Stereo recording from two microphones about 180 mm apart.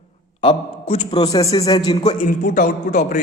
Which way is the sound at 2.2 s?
45° left (ahead or behind).